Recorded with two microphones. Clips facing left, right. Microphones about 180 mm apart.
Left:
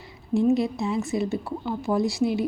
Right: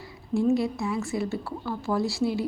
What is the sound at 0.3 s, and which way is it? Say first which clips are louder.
Speech: left 2 dB; 20° left (ahead or behind).